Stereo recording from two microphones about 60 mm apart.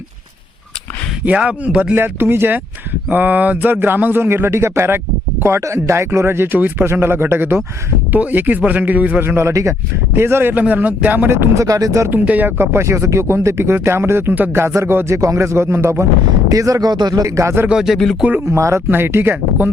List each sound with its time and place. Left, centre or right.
1.4 s a man's voice: right
2.0 s a man's voice: right
9.2 s a man's voice: right
9.5 s speech: right
10.2 s a man's voice: right
10.5 s a man's voice: right
11.5 s speech: right
12.1 s speech: right
13.7 s a man's voice: right
15.0 s speech: right
16.5 s speech: right
17.7 s speech: centre
18.4 s speech: right
18.9 s a man's voice: right